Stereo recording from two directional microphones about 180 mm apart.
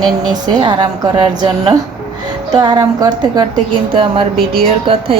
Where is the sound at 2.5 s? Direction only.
20° right (ahead or behind).